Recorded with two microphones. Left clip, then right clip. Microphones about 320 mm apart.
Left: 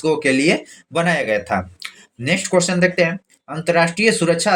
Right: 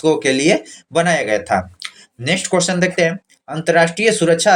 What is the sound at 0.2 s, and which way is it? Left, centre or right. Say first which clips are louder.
Speech: right 1 dB; right.